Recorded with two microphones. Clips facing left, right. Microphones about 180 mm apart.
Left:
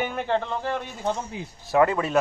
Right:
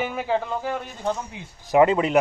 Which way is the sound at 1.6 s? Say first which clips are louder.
Right 3 dB; 20° right (ahead or behind).